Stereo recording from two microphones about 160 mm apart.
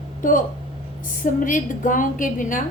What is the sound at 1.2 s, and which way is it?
A woman's voice, 55° left (ahead or behind).